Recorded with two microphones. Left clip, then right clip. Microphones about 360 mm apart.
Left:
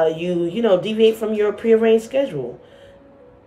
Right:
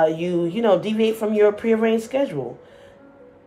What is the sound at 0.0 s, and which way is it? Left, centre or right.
Speech, centre.